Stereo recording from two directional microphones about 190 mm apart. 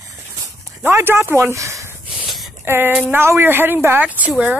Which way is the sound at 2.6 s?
10° right (ahead or behind).